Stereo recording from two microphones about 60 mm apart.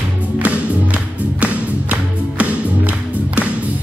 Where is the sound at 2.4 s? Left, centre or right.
Right.